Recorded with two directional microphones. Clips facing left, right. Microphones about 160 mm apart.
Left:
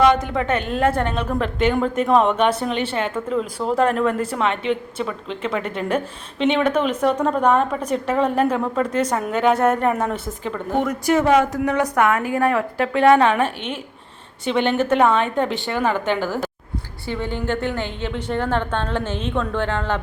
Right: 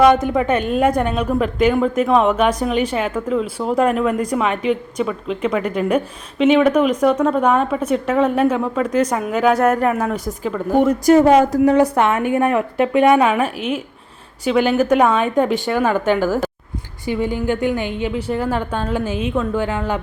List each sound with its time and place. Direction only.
0.0 s a woman's voice: 15° right (ahead or behind)
11.0 s a woman's voice: 35° right (ahead or behind); by 16.0 s 15° right (ahead or behind)
17.1 s a woman's voice: 10° right (ahead or behind)